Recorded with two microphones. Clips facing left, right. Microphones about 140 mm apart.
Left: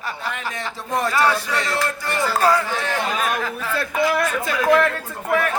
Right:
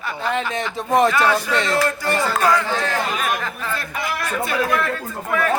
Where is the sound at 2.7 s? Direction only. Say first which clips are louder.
Right 2 dB; 35° right (ahead or behind).